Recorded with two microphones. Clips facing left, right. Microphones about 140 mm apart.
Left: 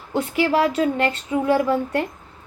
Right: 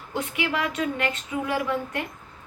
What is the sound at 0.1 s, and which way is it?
A woman's voice, 30° left (ahead or behind).